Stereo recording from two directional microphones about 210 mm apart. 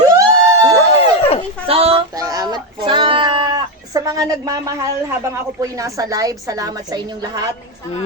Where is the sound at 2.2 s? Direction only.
15° right (ahead or behind).